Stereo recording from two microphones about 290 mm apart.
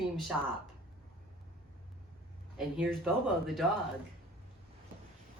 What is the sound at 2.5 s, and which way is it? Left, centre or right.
A woman's voice, centre.